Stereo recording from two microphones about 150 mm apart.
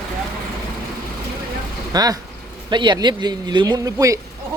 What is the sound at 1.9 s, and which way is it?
Speech, 25° right (ahead or behind).